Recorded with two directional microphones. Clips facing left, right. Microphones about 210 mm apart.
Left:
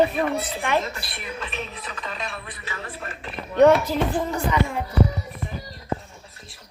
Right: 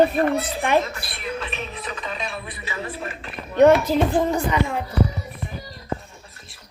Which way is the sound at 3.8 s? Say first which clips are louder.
Right 4 dB; 15° right (ahead or behind).